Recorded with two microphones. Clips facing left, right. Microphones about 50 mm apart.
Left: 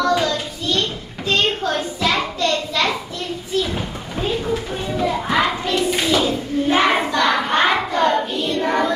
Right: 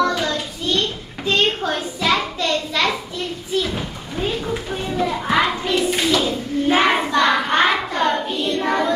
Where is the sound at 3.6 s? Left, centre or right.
Centre.